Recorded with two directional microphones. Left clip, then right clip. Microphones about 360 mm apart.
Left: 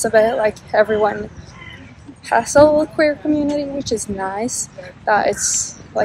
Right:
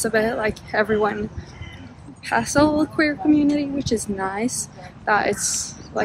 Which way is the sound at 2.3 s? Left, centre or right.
Centre.